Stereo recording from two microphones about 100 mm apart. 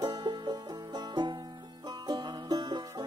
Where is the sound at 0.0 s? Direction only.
45° right (ahead or behind).